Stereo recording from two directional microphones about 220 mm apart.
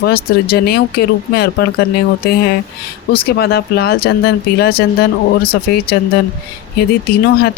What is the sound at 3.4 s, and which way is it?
Speech, 45° left (ahead or behind).